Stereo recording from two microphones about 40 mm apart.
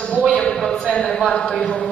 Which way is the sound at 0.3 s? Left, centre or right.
Left.